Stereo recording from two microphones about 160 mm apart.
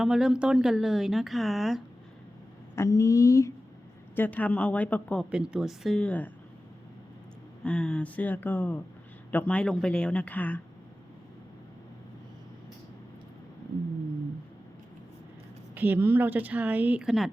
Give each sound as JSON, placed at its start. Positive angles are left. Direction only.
{"t": 0.0, "sound": "speech", "side_deg": -5}
{"t": 2.7, "sound": "speech", "side_deg": 20}
{"t": 5.3, "sound": "speech", "side_deg": -5}
{"t": 7.6, "sound": "speech", "side_deg": 5}
{"t": 15.7, "sound": "a woman's voice", "side_deg": -10}